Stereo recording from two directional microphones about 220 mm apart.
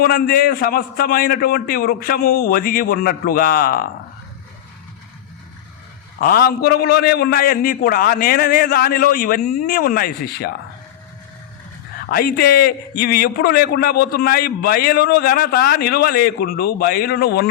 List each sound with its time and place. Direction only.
0.0 s a man's voice: 45° left (ahead or behind)
6.1 s a man's voice: 45° left (ahead or behind)
12.0 s a man's voice: 45° left (ahead or behind)